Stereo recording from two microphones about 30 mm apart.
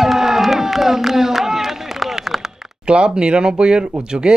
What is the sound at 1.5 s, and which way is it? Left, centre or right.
Run, centre.